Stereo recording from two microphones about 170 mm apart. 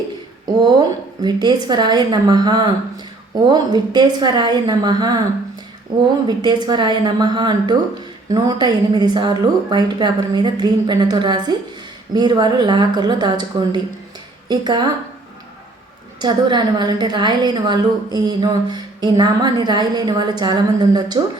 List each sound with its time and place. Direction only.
0.6 s a woman's voice: 25° right (ahead or behind)
6.2 s a woman's voice: 25° right (ahead or behind)
16.2 s a woman's voice: 25° right (ahead or behind)